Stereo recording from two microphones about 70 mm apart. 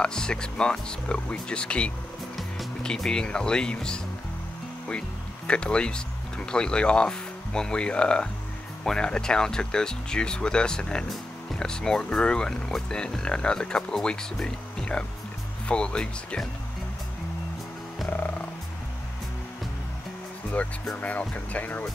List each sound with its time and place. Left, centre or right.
0.0 s speech: centre
5.5 s speech: centre
20.9 s speech: left